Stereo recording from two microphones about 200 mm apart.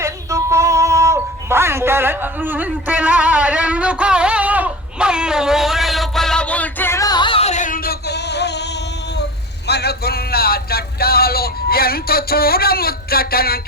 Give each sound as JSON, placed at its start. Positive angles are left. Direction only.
{"t": 0.0, "sound": "music", "side_deg": -15}
{"t": 9.6, "sound": "speech", "side_deg": 55}